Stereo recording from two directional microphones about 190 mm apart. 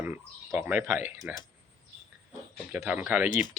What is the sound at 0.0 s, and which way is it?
Speech, 10° right (ahead or behind).